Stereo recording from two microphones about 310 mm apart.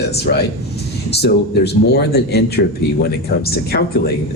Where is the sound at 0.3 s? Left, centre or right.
Left.